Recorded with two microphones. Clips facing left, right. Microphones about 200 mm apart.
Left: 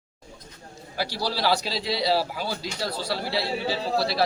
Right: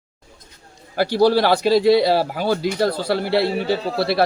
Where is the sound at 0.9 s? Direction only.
55° right (ahead or behind).